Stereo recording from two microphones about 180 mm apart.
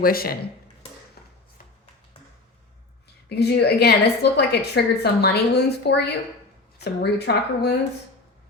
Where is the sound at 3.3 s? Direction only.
65° left (ahead or behind).